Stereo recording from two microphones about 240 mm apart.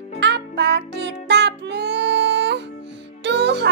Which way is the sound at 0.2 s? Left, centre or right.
Right.